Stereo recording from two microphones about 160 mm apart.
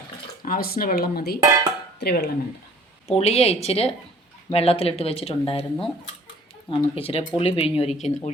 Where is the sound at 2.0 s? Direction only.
90° left.